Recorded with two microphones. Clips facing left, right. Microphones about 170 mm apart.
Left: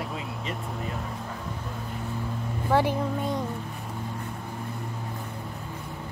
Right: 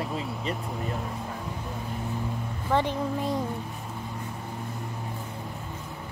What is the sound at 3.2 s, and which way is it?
Speech, centre (ahead or behind).